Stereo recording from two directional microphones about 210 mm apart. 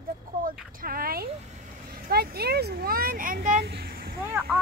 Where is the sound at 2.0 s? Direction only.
50° right (ahead or behind).